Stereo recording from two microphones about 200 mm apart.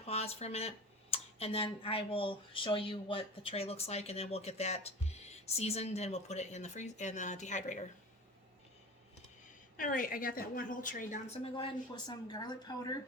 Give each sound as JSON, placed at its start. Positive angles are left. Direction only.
{"t": 0.0, "sound": "a sound", "side_deg": 30}
{"t": 1.1, "sound": "speech", "side_deg": 30}
{"t": 9.7, "sound": "a woman's voice", "side_deg": 45}
{"t": 11.5, "sound": "speech", "side_deg": 20}